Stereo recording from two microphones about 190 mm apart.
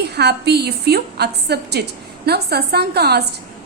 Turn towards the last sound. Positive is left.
turn(degrees=-60)  # may be behind; listen again after turning